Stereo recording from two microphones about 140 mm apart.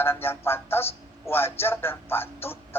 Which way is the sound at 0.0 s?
15° left (ahead or behind).